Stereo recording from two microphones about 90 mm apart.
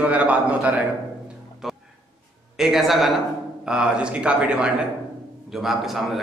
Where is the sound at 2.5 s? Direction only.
5° right (ahead or behind).